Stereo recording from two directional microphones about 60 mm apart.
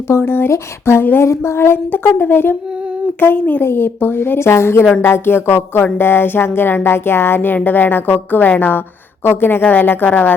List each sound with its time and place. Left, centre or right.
0.1 s music: left
0.9 s a sound: left
1.3 s music: left
3.3 s speech: left
3.6 s music: left